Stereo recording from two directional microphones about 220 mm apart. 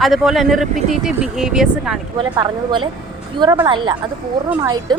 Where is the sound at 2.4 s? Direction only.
20° right (ahead or behind).